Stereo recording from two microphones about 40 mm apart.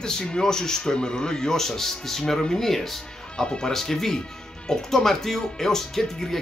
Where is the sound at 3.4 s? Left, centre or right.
Centre.